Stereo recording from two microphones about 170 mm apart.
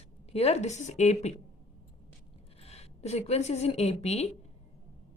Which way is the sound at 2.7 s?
40° left (ahead or behind).